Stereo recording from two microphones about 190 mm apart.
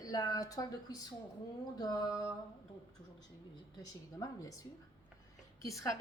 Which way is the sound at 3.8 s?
20° left (ahead or behind).